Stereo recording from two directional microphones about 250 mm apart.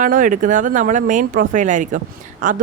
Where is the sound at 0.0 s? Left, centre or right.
Right.